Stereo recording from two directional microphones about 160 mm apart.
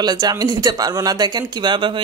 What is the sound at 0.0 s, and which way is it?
Speech, 25° right (ahead or behind).